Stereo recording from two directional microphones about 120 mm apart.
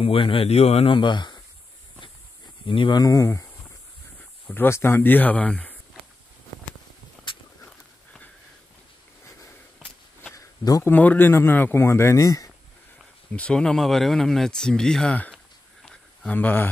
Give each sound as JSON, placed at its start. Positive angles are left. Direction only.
{"t": 0.0, "sound": "speech", "side_deg": 50}
{"t": 0.9, "sound": "speech", "side_deg": 40}
{"t": 2.6, "sound": "speech", "side_deg": 45}
{"t": 3.0, "sound": "speech", "side_deg": 30}
{"t": 4.5, "sound": "speech", "side_deg": 20}
{"t": 7.6, "sound": "walk", "side_deg": 10}
{"t": 10.3, "sound": "a sound", "side_deg": 30}
{"t": 10.8, "sound": "speech", "side_deg": 15}
{"t": 13.3, "sound": "speech", "side_deg": 10}
{"t": 15.3, "sound": "a sound", "side_deg": 0}
{"t": 16.3, "sound": "speech", "side_deg": 15}